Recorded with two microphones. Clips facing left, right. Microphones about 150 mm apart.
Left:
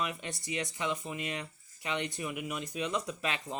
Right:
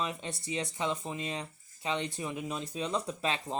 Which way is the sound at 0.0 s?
30° right (ahead or behind).